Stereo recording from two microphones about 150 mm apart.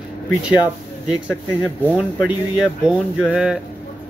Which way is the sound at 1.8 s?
10° right (ahead or behind).